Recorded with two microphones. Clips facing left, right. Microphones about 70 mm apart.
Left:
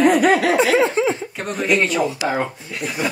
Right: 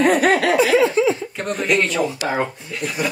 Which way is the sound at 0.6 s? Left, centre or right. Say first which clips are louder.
Right 1 dB; left.